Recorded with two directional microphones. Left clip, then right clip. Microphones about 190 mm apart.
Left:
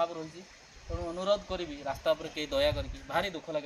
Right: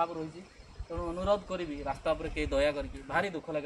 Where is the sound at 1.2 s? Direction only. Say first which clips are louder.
Left 1 dB; 20° right (ahead or behind).